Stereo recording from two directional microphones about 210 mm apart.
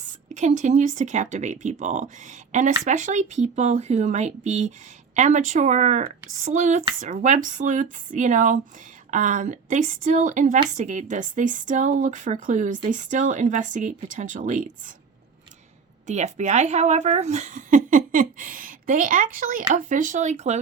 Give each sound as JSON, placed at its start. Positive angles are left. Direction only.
{"t": 0.0, "sound": "speech", "side_deg": -35}
{"t": 16.0, "sound": "speech", "side_deg": -35}